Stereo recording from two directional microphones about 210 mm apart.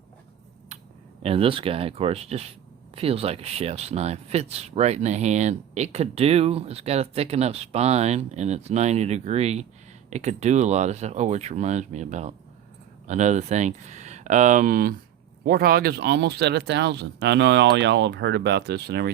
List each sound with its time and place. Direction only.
1.2 s speech: 25° right (ahead or behind); by 19.1 s 50° right (ahead or behind)